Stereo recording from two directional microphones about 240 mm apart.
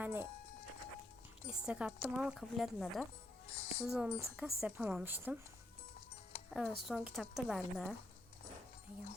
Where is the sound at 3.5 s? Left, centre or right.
Left.